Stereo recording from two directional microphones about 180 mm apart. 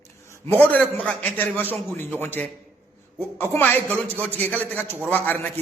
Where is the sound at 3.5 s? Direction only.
10° left (ahead or behind).